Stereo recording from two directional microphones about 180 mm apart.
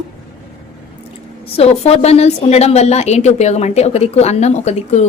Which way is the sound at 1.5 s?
35° left (ahead or behind).